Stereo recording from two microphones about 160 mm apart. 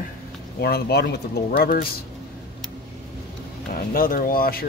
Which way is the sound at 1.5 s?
65° left (ahead or behind).